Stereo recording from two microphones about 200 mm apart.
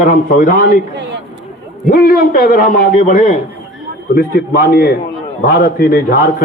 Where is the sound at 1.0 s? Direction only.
60° right (ahead or behind).